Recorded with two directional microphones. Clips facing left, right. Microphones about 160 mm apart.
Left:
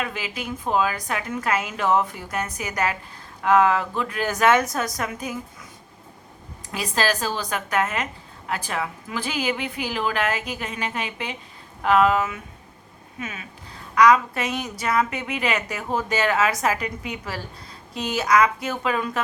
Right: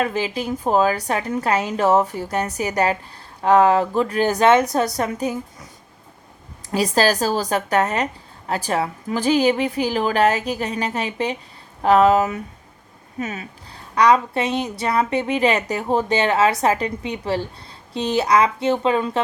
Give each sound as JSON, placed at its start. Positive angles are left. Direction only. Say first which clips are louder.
{"t": 0.0, "sound": "a woman's voice", "louder": "right 7 dB", "side_deg": -35}
{"t": 6.7, "sound": "a woman's voice", "louder": "right 6 dB", "side_deg": -40}